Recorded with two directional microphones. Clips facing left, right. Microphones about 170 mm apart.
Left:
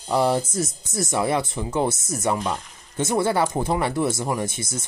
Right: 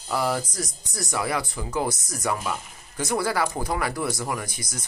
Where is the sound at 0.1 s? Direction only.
25° left (ahead or behind).